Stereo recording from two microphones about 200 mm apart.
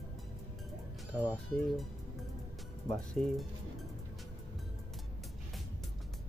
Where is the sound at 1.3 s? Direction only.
Centre (ahead or behind).